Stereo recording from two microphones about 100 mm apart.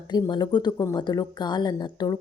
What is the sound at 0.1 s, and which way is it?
A woman's voice, 45° left (ahead or behind).